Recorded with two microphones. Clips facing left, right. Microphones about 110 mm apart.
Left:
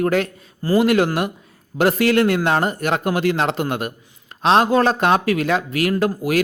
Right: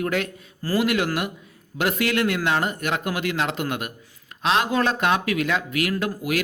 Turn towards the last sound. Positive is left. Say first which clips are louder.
# left 6 dB
turn(degrees=35)  # may be behind; listen again after turning